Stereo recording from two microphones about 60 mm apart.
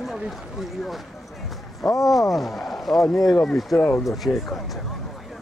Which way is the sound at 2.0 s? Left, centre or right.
Centre.